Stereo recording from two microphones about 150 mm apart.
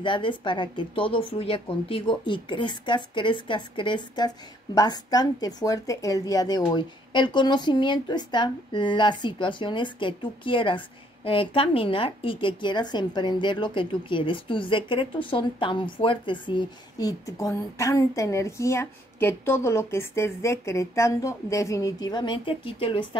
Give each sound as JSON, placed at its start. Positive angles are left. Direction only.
{"t": 0.0, "sound": "a woman's voice", "side_deg": 35}